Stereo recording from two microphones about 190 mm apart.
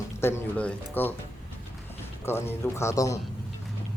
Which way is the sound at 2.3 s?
10° left (ahead or behind).